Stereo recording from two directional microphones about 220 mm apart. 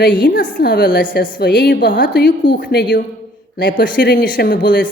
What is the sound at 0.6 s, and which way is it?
A woman's voice, 45° left (ahead or behind).